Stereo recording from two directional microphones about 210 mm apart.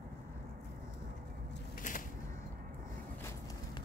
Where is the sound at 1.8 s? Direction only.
40° left (ahead or behind).